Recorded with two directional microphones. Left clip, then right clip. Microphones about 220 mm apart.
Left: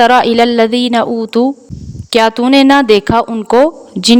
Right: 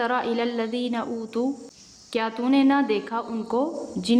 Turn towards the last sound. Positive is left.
turn(degrees=50)  # may be behind; listen again after turning